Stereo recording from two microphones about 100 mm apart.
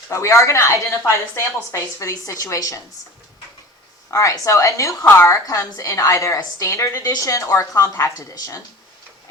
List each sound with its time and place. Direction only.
0.1 s a woman's voice: 30° left (ahead or behind)
4.1 s a woman's voice: 30° left (ahead or behind)